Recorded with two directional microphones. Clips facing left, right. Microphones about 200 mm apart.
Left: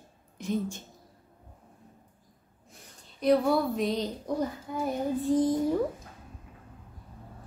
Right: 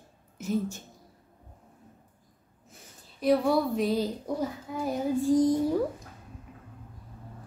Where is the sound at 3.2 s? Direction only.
Centre (ahead or behind).